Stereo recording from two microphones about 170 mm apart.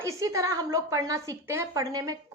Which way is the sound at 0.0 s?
20° right (ahead or behind).